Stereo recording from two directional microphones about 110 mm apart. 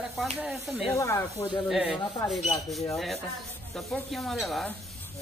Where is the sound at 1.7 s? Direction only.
Centre (ahead or behind).